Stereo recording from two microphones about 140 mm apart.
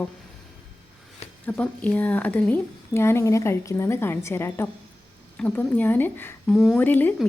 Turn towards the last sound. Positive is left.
turn(degrees=15)  # may be behind; listen again after turning